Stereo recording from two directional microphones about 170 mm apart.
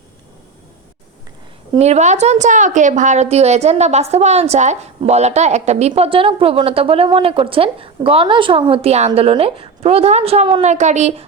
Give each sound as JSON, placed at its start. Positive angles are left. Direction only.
{"t": 1.8, "sound": "a woman's voice", "side_deg": -40}